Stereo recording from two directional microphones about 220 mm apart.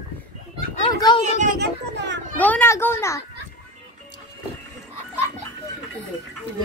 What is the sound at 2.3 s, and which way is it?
Speech, 5° left (ahead or behind).